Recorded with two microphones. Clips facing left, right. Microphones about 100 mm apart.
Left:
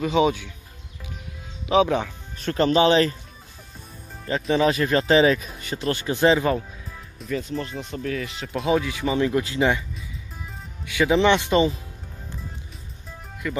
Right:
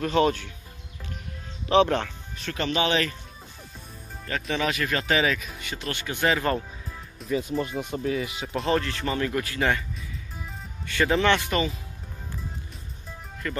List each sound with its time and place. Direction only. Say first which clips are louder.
0.0 s speech: left 2 dB; 5° left (ahead or behind)
1.7 s speech: left 1 dB; 5° left (ahead or behind)
2.3 s speech: left 8 dB; 35° left (ahead or behind)
4.3 s speech: left 7 dB; 30° left (ahead or behind)
7.2 s speech: right 1 dB; 10° right (ahead or behind)
8.3 s speech: left 1 dB; 5° right (ahead or behind)
8.6 s speech: left 4 dB; 10° left (ahead or behind)
10.9 s speech: left 4 dB; 10° left (ahead or behind)
13.4 s speech: left 4 dB; 5° left (ahead or behind)